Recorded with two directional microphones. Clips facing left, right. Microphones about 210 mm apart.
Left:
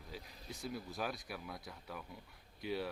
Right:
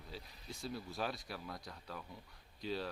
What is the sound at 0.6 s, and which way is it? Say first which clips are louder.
Speech: even; 20° left (ahead or behind).